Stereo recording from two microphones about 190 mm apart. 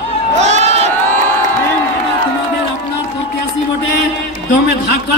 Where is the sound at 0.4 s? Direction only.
35° right (ahead or behind).